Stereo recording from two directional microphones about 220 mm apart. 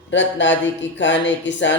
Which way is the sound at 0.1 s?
55° left (ahead or behind).